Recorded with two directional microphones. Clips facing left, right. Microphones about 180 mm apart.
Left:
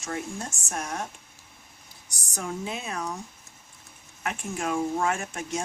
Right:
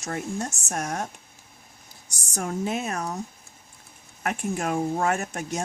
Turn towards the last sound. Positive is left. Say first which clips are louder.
# right 2 dB
turn(degrees=-40)  # may be behind; listen again after turning